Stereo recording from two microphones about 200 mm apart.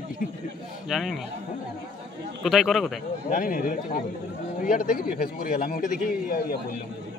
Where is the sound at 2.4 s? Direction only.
Centre (ahead or behind).